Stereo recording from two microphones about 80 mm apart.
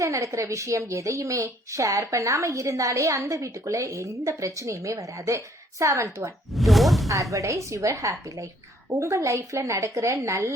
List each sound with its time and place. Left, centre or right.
0.0 s a woman's voice: right
6.5 s whoosh: centre
7.1 s a woman's voice: right